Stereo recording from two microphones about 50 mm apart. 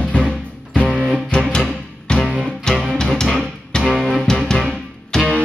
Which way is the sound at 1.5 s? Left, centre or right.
Centre.